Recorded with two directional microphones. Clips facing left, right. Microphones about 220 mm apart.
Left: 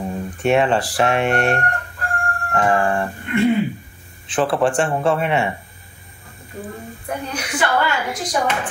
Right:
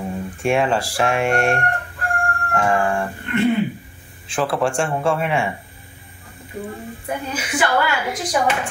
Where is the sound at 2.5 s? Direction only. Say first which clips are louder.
Left 1 dB; 5° left (ahead or behind).